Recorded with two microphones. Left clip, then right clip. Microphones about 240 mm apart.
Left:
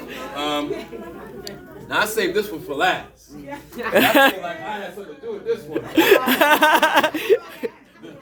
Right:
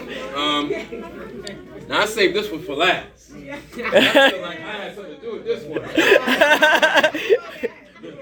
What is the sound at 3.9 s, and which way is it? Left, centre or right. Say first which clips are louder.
Speech: right 1 dB; centre.